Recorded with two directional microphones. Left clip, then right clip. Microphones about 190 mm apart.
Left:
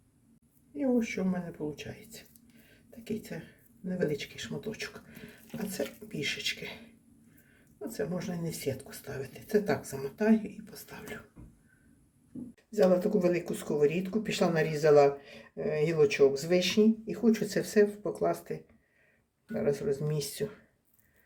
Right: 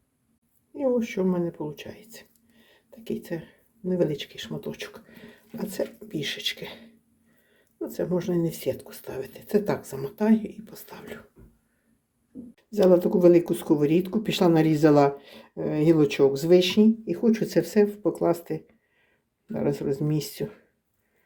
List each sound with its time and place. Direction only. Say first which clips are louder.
0.8 s speech: right 6 dB; 40° right (ahead or behind)
7.8 s speech: right 7 dB; 35° right (ahead or behind)
12.7 s speech: right 6 dB; 40° right (ahead or behind)